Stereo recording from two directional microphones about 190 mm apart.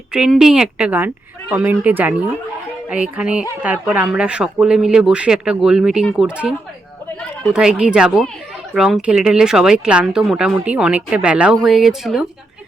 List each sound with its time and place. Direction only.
0.1 s a woman's voice: 5° right (ahead or behind)
7.5 s speech: 5° right (ahead or behind)